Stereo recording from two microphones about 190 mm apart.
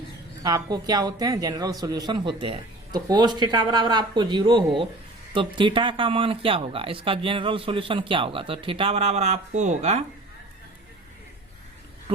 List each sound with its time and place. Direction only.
0.4 s speech: 20° right (ahead or behind); by 10.0 s 40° right (ahead or behind)